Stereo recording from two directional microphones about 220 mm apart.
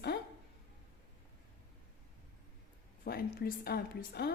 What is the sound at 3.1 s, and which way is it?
A woman's voice, 45° left (ahead or behind).